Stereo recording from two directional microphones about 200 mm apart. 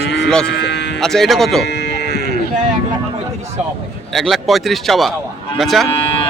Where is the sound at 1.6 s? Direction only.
60° left (ahead or behind).